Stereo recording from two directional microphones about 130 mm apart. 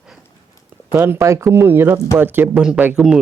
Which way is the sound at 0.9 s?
15° right (ahead or behind).